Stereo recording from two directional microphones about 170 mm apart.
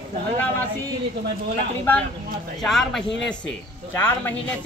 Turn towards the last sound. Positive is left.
turn(degrees=10)  # may be behind; listen again after turning